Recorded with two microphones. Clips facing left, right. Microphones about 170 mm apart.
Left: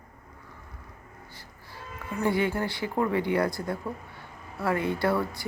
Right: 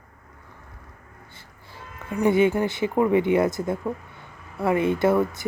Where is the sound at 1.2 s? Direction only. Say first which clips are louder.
Even; 25° right (ahead or behind).